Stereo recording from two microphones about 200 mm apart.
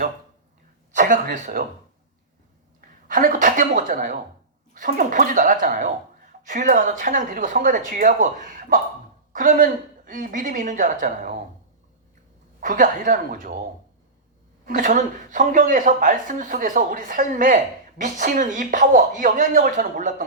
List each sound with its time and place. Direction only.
0.9 s speech: 40° right (ahead or behind)
3.1 s speech: 40° right (ahead or behind)
12.5 s speech: 40° right (ahead or behind)
14.6 s speech: 40° right (ahead or behind)